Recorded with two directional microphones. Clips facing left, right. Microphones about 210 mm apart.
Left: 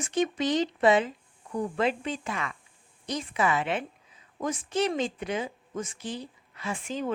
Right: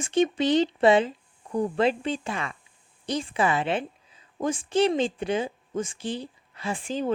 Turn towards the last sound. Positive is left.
turn(degrees=-30)  # may be behind; listen again after turning